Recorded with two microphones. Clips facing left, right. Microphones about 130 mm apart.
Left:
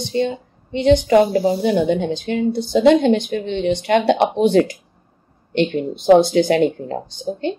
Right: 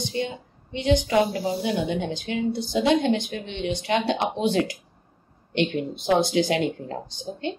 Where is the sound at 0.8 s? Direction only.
55° left (ahead or behind).